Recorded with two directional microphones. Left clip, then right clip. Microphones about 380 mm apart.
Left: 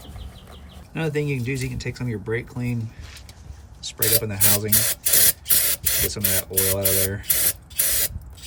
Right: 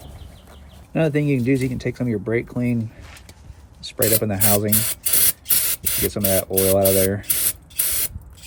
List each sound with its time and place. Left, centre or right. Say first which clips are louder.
0.9 s speech: right 5 dB; centre
4.7 s spray: left 2 dB; centre
6.2 s speech: right 6 dB; right
7.3 s spray: left 1 dB; centre